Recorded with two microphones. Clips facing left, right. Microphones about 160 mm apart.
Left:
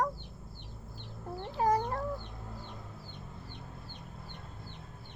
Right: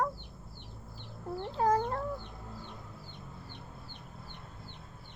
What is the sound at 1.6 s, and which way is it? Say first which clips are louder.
Cat: even; 15° left (ahead or behind).